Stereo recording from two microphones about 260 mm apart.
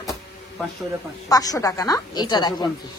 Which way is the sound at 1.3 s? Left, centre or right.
Centre.